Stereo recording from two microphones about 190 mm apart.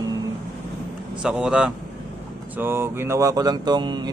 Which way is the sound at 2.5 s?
10° right (ahead or behind).